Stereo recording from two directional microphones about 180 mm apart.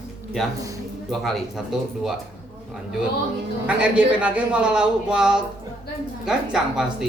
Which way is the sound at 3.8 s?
10° right (ahead or behind).